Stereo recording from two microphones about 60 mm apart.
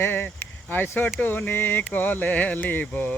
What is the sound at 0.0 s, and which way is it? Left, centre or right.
Speech, left.